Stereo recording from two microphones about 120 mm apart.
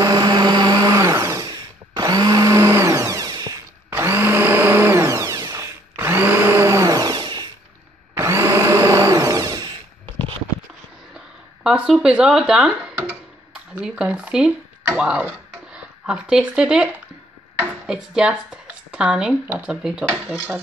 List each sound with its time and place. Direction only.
0.0 s blender: 30° right (ahead or behind)
3.9 s blender: 20° right (ahead or behind); by 7.4 s 40° right (ahead or behind)
8.1 s blender: 25° right (ahead or behind)
11.6 s speech: 5° right (ahead or behind)
12.9 s a sound: 15° right (ahead or behind)
13.7 s speech: 5° right (ahead or behind)